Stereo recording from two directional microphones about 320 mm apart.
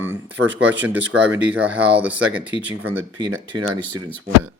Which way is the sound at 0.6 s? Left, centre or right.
Right.